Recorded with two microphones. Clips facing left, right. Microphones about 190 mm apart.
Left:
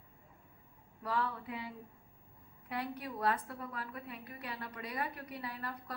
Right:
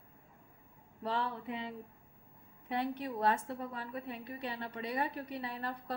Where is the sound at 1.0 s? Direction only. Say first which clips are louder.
Right 1 dB; 25° right (ahead or behind).